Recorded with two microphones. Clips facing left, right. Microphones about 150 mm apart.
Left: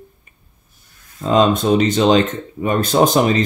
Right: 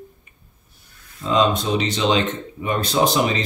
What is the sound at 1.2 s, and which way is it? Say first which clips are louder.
Speech: left 4 dB; 50° left (ahead or behind).